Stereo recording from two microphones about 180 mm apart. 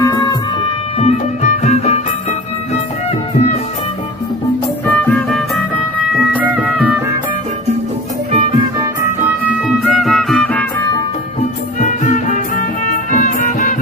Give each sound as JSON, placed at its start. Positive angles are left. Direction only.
{"t": 0.0, "sound": "music", "side_deg": 20}
{"t": 0.9, "sound": "music", "side_deg": 40}
{"t": 6.3, "sound": "music", "side_deg": -10}
{"t": 9.4, "sound": "music", "side_deg": -5}
{"t": 11.9, "sound": "music", "side_deg": 45}